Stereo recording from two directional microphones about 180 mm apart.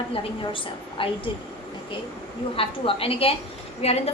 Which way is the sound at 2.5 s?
30° left (ahead or behind).